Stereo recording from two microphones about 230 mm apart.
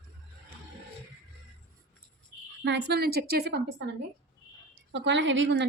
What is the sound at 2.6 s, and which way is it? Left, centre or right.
Speech, right.